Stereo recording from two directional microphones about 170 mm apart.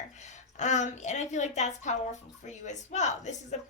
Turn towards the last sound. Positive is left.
turn(degrees=45)  # may be behind; listen again after turning